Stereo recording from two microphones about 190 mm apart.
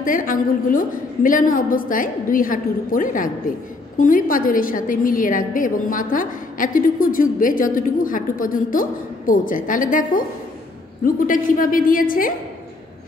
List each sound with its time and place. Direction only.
0.0 s a woman's voice: 45° left (ahead or behind)